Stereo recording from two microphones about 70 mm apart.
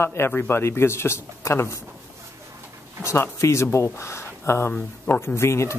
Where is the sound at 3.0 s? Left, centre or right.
Left.